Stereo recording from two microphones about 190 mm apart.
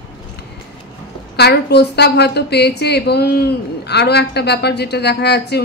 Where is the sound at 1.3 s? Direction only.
60° left (ahead or behind).